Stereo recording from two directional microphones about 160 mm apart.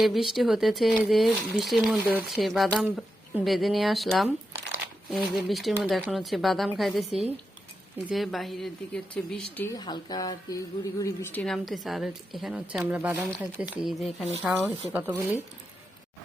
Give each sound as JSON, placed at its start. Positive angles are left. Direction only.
{"t": 0.0, "sound": "a woman's voice", "side_deg": 0}
{"t": 5.3, "sound": "a woman's voice", "side_deg": 0}
{"t": 9.7, "sound": "a woman's voice", "side_deg": 25}
{"t": 11.4, "sound": "a woman's voice", "side_deg": 0}